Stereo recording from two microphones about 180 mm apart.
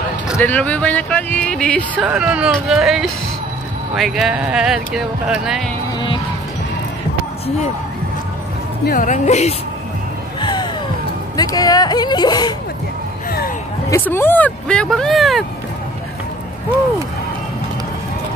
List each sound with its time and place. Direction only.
0.4 s speech: 10° left (ahead or behind)
2.0 s speech: 5° right (ahead or behind)
8.8 s speech: 45° left (ahead or behind)
10.4 s music: 25° left (ahead or behind)
11.3 s speech: 20° left (ahead or behind)
13.8 s speech: 15° left (ahead or behind)